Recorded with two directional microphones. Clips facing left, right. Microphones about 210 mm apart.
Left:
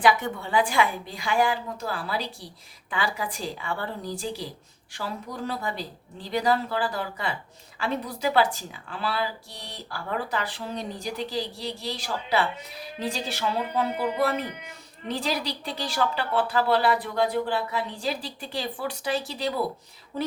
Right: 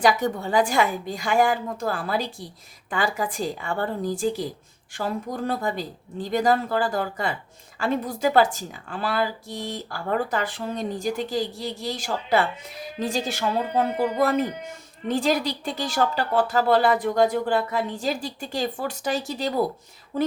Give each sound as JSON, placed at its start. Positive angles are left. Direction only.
{"t": 0.0, "sound": "speech", "side_deg": -40}